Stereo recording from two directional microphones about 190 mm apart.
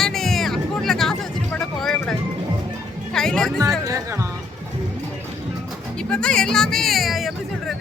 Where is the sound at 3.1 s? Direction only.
5° left (ahead or behind).